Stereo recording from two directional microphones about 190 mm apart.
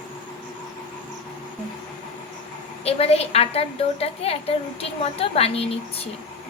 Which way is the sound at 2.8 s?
30° left (ahead or behind).